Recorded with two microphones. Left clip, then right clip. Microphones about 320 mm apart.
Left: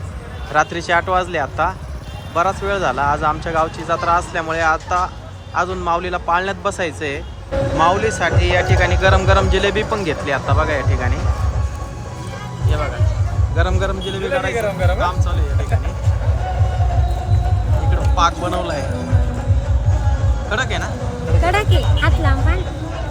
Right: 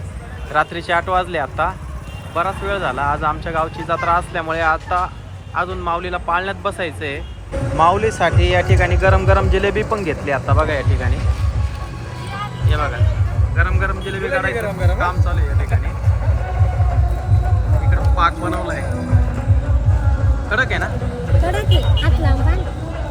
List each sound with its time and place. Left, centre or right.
0.5 s a man's voice: centre
8.4 s speech: left
8.8 s a man's voice: centre
13.6 s a man's voice: centre
18.2 s a man's voice: centre
20.5 s a man's voice: centre